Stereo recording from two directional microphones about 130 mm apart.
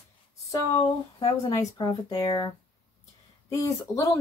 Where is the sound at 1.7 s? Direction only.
30° left (ahead or behind).